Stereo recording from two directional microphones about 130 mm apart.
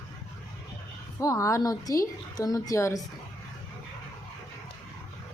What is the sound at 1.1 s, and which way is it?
A woman's voice, 25° left (ahead or behind).